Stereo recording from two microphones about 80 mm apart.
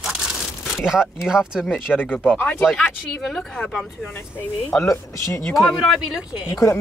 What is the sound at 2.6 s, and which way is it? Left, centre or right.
Speech, centre.